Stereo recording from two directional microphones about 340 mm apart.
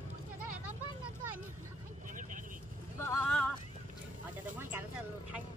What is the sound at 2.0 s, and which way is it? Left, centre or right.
Vehicle, right.